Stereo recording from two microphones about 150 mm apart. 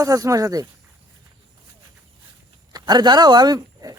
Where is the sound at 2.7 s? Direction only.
30° right (ahead or behind).